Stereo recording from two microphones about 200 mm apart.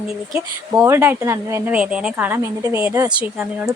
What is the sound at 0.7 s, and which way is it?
A woman's voice, 10° right (ahead or behind).